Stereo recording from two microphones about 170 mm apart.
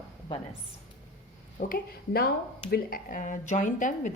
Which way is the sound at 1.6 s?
60° left (ahead or behind).